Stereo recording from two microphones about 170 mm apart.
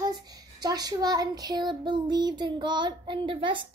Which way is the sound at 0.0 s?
20° right (ahead or behind).